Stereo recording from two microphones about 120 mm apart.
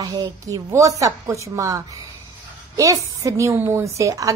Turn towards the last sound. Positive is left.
turn(degrees=-25)  # may be behind; listen again after turning